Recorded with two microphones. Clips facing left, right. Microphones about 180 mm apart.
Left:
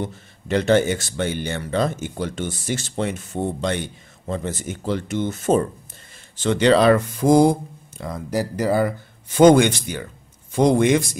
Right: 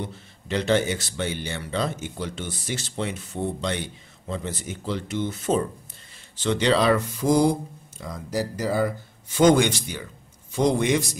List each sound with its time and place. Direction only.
0.0 s speech: 50° left (ahead or behind)
8.0 s speech: 60° left (ahead or behind)